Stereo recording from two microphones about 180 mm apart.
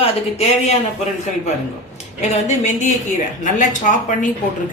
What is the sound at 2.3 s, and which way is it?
A man's voice, 40° left (ahead or behind).